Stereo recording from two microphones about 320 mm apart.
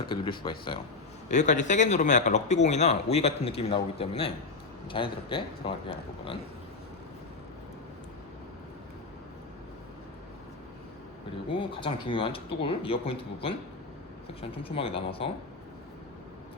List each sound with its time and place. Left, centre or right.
0.0 s speech: centre
11.4 s speech: centre